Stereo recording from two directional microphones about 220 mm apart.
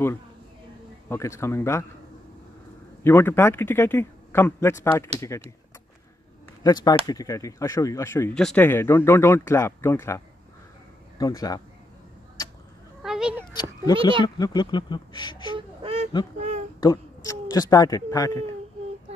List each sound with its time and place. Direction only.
1.0 s speech: 10° left (ahead or behind)
3.0 s speech: 10° left (ahead or behind)
6.6 s speech: 20° left (ahead or behind)
13.0 s a sound: 5° right (ahead or behind)
14.2 s speech: 20° left (ahead or behind)
15.5 s honk: 25° right (ahead or behind)
16.3 s a sound: 30° right (ahead or behind)
16.8 s speech: 15° left (ahead or behind)